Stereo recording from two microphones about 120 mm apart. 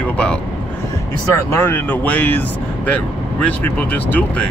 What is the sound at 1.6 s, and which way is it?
Speech, 15° left (ahead or behind).